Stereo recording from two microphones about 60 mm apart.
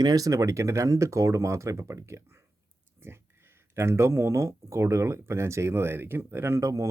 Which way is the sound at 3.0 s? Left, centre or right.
Right.